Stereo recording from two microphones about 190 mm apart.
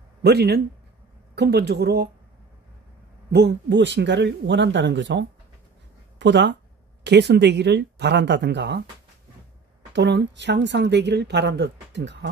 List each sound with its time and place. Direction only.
0.2 s speech: 60° right (ahead or behind)
3.3 s speech: 65° right (ahead or behind)
9.9 s speech: 65° right (ahead or behind)